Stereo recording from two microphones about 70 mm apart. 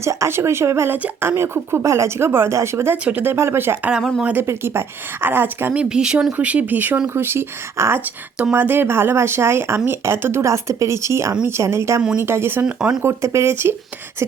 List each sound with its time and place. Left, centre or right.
0.0 s speech: right
0.9 s speech: right
3.0 s speech: centre
3.2 s speech: right
5.7 s speech: centre; by 10.4 s right
10.4 s speech: right
12.6 s speech: centre
13.0 s speech: right